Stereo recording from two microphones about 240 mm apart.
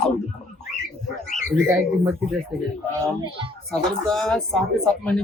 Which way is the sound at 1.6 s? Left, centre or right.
Centre.